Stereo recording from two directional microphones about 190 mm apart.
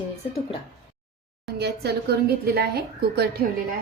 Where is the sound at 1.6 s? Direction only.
60° right (ahead or behind).